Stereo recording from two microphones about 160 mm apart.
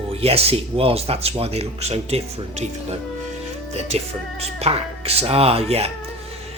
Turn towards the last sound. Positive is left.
turn(degrees=-40)  # may be behind; listen again after turning